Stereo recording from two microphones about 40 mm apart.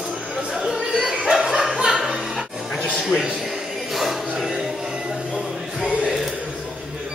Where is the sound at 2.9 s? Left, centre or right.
Centre.